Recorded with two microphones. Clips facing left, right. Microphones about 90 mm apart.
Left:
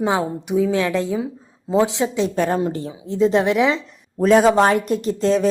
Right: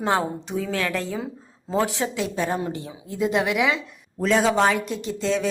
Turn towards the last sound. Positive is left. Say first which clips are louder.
# left 7 dB
turn(degrees=45)  # may be behind; listen again after turning